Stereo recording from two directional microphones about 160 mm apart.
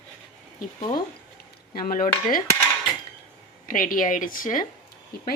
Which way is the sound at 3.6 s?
60° left (ahead or behind).